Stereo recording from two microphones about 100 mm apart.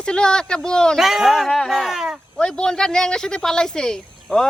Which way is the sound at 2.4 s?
5° left (ahead or behind).